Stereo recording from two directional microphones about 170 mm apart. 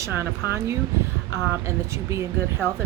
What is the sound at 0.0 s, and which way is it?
Speech, 15° right (ahead or behind).